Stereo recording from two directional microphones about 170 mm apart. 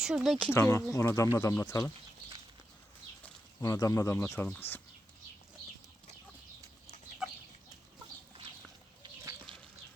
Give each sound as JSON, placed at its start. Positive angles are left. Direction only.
{"t": 0.0, "sound": "speech", "side_deg": -5}
{"t": 0.5, "sound": "speech", "side_deg": 15}
{"t": 3.6, "sound": "speech", "side_deg": 20}
{"t": 7.2, "sound": "chicken", "side_deg": 0}
{"t": 9.5, "sound": "a sound", "side_deg": -30}